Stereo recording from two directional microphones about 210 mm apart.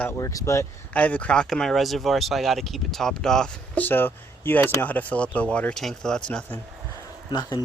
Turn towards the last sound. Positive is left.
turn(degrees=20)  # may be behind; listen again after turning